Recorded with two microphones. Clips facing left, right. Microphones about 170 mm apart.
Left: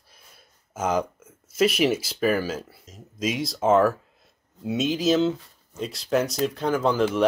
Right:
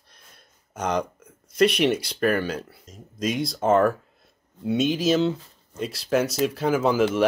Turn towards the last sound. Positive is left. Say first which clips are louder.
# right 1 dB
turn(degrees=-5)  # may be behind; listen again after turning